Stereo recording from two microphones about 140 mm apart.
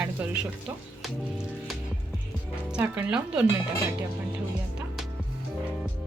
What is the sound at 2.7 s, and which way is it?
Speech, 10° right (ahead or behind).